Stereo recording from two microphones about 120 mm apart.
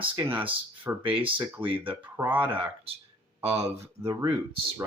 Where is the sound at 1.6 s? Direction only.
45° right (ahead or behind).